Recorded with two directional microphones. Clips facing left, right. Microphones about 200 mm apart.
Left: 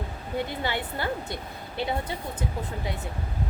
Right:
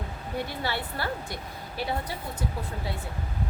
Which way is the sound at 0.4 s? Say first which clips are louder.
Left 2 dB; 20° left (ahead or behind).